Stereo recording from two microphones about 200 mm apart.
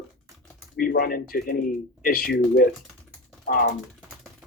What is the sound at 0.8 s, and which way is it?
Speech, 45° left (ahead or behind).